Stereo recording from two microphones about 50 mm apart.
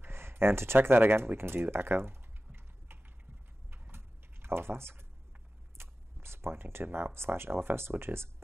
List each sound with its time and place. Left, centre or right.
0.0 s speech: right
3.7 s typing: right
5.8 s speech: right